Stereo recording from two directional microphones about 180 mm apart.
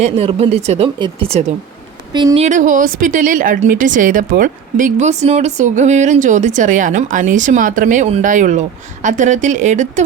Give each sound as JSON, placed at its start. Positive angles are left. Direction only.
{"t": 0.0, "sound": "a woman's voice", "side_deg": -35}